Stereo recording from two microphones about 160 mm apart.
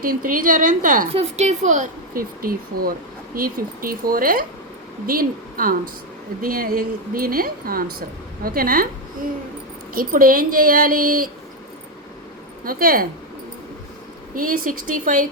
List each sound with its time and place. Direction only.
0.0 s speech: 60° right (ahead or behind)
1.1 s speech: 45° right (ahead or behind); by 8.9 s 65° right (ahead or behind)
9.9 s speech: 60° right (ahead or behind)
12.6 s speech: 65° right (ahead or behind)
14.3 s speech: 60° right (ahead or behind)